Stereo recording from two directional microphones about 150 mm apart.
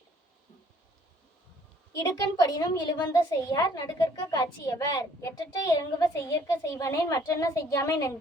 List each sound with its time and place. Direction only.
2.0 s a woman's voice: 20° left (ahead or behind)